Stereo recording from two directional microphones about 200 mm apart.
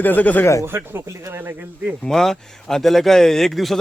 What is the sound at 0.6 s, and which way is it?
Speech, 10° right (ahead or behind).